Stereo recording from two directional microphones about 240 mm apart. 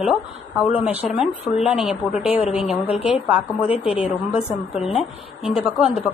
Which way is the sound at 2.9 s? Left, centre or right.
Left.